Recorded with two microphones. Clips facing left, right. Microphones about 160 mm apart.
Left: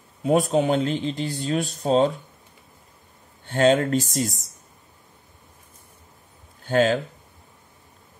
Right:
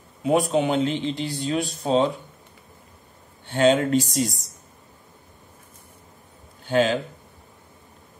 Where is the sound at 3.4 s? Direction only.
40° left (ahead or behind).